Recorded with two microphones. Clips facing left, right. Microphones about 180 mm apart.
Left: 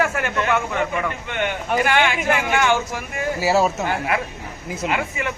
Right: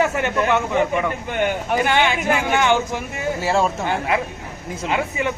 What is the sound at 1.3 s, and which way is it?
Speech, 40° right (ahead or behind).